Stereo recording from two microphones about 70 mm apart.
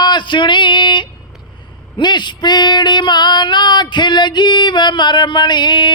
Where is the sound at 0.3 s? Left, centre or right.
Left.